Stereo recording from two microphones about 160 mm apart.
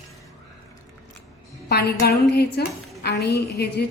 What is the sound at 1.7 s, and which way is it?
A woman's voice, 85° left.